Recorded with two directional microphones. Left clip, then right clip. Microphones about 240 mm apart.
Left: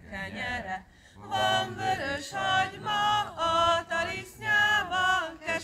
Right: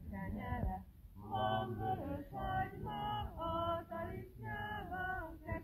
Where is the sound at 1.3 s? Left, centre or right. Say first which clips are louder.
Left 11 dB; left.